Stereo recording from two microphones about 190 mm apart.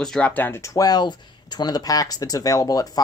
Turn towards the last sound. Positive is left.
turn(degrees=20)  # may be behind; listen again after turning